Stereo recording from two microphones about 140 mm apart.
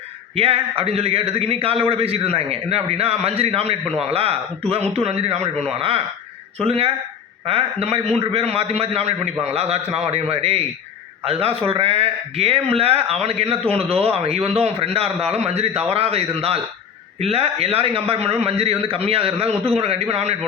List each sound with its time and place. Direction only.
0.3 s a man's voice: 45° right (ahead or behind)
6.7 s a man's voice: 45° right (ahead or behind)